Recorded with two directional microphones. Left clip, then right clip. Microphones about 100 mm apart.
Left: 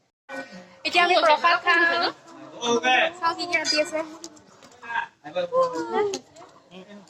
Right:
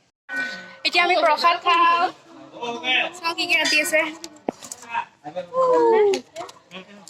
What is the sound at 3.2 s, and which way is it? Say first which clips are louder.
Speech: right 3 dB; 30° right (ahead or behind).